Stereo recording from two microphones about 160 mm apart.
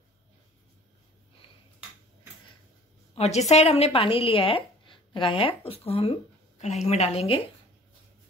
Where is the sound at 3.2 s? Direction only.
45° left (ahead or behind).